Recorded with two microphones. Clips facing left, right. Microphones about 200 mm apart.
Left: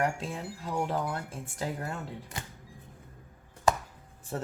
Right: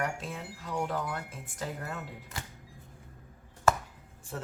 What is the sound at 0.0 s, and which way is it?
Speech, 30° left (ahead or behind).